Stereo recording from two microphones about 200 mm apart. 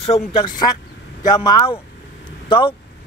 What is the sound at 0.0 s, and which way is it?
Speech, 25° left (ahead or behind).